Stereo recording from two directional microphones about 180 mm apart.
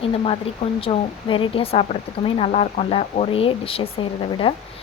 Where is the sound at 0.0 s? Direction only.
30° left (ahead or behind).